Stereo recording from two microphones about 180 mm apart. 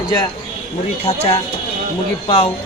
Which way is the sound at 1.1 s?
35° left (ahead or behind).